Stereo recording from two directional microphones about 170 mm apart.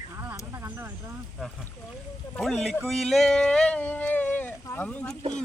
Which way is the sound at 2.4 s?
Centre (ahead or behind).